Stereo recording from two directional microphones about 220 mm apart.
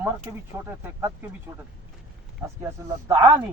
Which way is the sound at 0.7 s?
10° right (ahead or behind).